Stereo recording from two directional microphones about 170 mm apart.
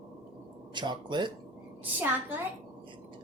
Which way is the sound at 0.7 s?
25° right (ahead or behind).